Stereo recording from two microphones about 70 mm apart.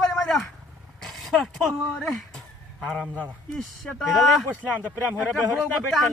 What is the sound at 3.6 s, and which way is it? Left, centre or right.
Speech, centre.